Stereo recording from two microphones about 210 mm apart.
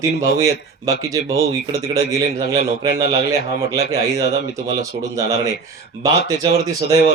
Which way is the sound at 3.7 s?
50° left (ahead or behind).